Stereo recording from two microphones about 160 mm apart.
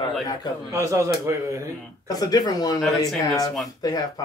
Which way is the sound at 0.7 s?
20° right (ahead or behind).